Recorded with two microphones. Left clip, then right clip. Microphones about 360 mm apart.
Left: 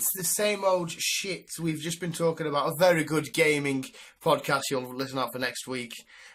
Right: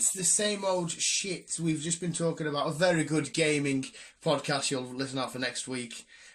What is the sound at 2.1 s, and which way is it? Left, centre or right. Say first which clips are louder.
Speech: left 5 dB; left.